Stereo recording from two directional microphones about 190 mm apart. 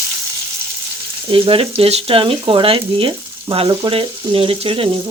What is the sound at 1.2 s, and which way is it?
Speech, 30° right (ahead or behind).